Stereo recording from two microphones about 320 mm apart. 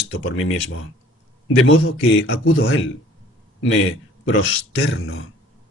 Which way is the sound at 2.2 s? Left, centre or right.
Left.